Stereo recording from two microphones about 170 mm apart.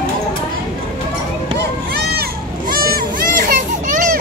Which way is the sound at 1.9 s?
70° right (ahead or behind).